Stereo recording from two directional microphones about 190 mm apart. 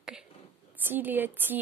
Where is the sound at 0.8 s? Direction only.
10° right (ahead or behind).